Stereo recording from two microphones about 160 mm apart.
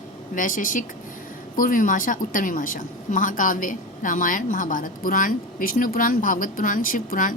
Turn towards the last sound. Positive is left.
turn(degrees=60)  # may be behind; listen again after turning